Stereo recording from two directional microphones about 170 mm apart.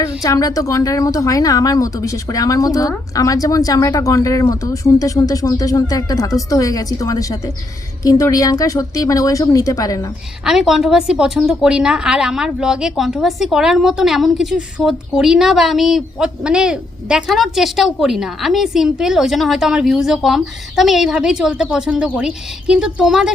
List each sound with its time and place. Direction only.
0.0 s speech: 20° left (ahead or behind)
10.4 s a woman's voice: 5° right (ahead or behind)